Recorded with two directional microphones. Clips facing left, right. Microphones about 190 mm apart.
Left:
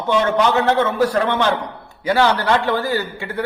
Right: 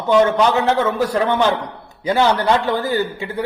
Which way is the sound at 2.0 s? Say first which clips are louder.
Right 1 dB; 20° right (ahead or behind).